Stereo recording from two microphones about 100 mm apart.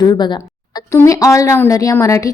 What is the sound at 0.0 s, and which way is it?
A woman's voice, 45° left (ahead or behind).